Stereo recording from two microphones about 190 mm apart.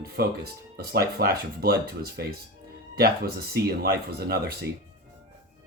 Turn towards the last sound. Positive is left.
turn(degrees=-55)  # may be behind; listen again after turning